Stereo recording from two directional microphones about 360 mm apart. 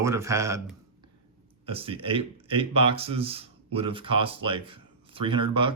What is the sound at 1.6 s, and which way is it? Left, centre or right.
Speech, centre.